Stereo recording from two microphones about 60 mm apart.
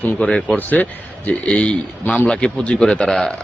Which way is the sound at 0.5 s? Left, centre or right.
Left.